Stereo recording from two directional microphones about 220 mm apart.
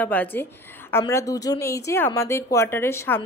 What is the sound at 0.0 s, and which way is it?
A woman's voice, 5° left (ahead or behind).